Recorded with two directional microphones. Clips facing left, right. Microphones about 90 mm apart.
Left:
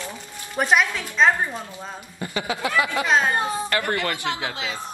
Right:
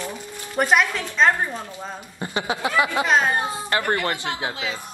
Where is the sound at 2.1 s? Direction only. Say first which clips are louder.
Right 1 dB; 25° right (ahead or behind).